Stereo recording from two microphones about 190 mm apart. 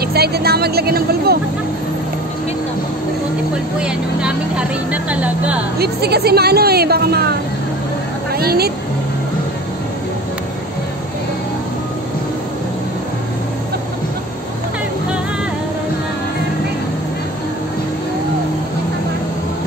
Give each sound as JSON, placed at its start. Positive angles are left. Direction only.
{"t": 0.0, "sound": "a woman's voice", "side_deg": -55}
{"t": 3.8, "sound": "speech", "side_deg": -5}
{"t": 5.8, "sound": "a woman's voice", "side_deg": -55}